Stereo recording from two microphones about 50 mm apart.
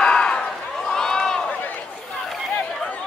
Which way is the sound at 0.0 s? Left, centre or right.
Centre.